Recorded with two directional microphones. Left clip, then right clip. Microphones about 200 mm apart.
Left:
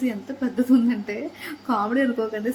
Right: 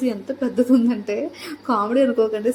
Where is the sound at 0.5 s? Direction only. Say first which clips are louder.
Right 2 dB; 5° right (ahead or behind).